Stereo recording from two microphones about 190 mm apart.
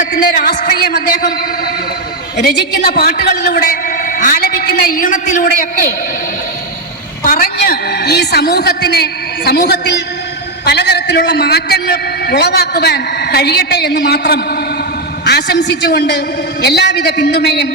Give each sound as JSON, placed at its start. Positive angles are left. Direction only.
{"t": 0.0, "sound": "a sound", "side_deg": 50}
{"t": 2.4, "sound": "a man's voice", "side_deg": 55}
{"t": 7.3, "sound": "a woman's voice", "side_deg": 50}